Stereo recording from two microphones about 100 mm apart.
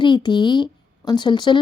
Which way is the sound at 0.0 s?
50° left (ahead or behind).